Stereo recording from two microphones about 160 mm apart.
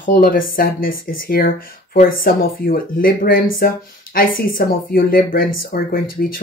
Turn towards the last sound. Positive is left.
turn(degrees=65)  # may be behind; listen again after turning